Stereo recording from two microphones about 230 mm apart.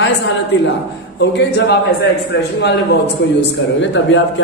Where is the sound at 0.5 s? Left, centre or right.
Left.